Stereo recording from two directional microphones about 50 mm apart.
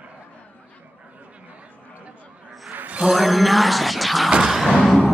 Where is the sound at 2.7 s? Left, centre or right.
Right.